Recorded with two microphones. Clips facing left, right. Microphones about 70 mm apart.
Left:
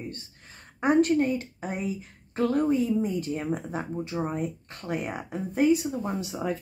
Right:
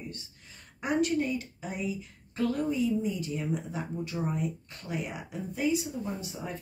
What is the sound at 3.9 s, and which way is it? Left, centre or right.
A woman's voice, left.